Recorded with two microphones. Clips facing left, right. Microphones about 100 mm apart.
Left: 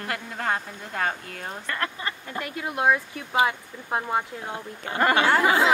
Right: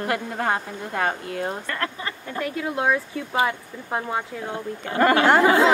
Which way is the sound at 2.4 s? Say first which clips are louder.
Right 3 dB; 20° left (ahead or behind).